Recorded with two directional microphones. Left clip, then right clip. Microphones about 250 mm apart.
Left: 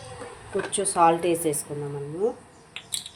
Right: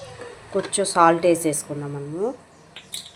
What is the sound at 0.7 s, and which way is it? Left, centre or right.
Speech, centre.